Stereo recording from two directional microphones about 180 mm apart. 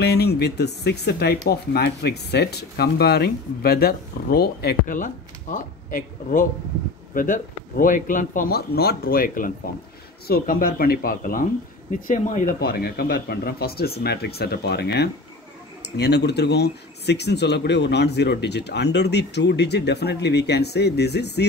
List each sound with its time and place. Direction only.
0.0 s speech: 65° left (ahead or behind)